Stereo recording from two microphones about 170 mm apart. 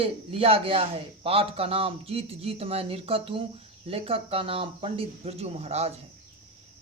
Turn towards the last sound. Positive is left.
turn(degrees=-40)  # may be behind; listen again after turning